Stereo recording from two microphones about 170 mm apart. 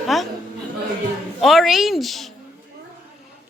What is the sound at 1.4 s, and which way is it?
Speech, centre (ahead or behind).